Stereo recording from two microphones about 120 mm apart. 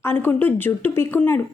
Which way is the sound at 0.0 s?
20° left (ahead or behind).